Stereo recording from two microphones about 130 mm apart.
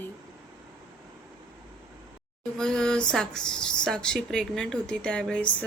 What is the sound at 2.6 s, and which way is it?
Speech, 5° left (ahead or behind).